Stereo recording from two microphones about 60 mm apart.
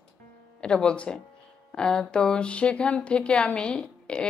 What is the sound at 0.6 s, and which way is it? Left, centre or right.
Speech, centre.